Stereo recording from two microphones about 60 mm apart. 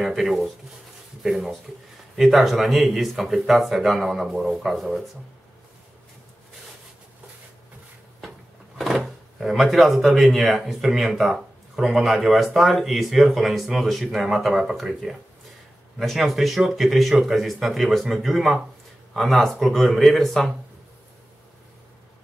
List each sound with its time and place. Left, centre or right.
0.0 s speech: centre
8.7 s speech: centre
16.0 s speech: centre